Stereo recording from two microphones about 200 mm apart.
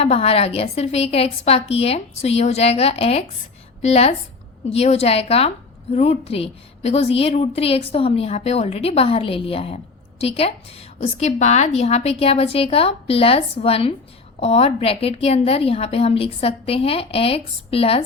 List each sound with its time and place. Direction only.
0.0 s a woman's voice: 30° left (ahead or behind)